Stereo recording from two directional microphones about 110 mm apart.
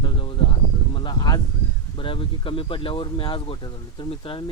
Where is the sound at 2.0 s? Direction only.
50° left (ahead or behind).